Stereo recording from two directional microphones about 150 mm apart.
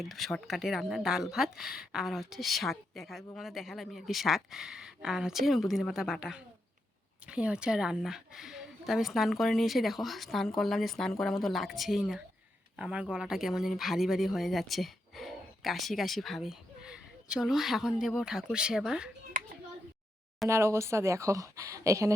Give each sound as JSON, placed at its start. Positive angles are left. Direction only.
{"t": 0.0, "sound": "a woman's voice", "side_deg": 0}
{"t": 20.5, "sound": "speech", "side_deg": -20}